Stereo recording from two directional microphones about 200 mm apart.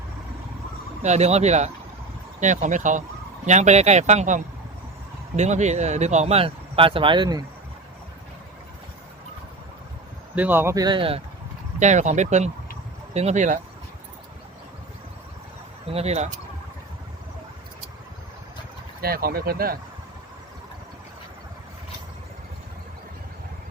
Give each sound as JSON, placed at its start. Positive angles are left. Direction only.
{"t": 1.0, "sound": "speech", "side_deg": -35}
{"t": 10.3, "sound": "speech", "side_deg": -10}
{"t": 11.8, "sound": "speech", "side_deg": -35}
{"t": 15.9, "sound": "speech", "side_deg": -30}
{"t": 19.0, "sound": "speech", "side_deg": -50}